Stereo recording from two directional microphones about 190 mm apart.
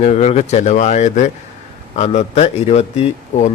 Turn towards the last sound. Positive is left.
turn(degrees=35)  # may be behind; listen again after turning